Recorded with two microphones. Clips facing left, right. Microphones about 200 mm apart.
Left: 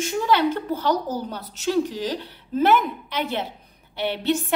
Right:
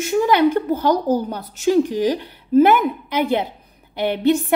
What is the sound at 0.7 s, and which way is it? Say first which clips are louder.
Speech: right 6 dB; 50° right (ahead or behind).